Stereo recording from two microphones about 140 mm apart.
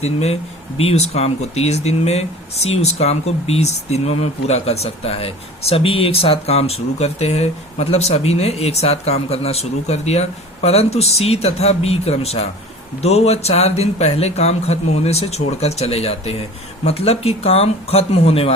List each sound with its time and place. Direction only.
0.0 s speech: 50° left (ahead or behind)